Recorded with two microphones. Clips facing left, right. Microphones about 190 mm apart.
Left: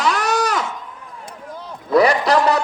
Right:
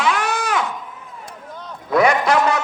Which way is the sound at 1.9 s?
35° left (ahead or behind).